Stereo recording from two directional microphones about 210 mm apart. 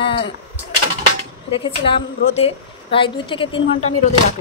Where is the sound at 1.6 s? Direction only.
25° left (ahead or behind).